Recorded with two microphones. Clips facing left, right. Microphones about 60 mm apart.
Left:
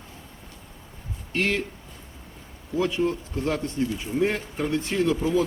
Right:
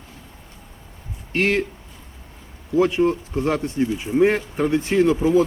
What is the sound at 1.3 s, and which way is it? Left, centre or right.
Speech, right.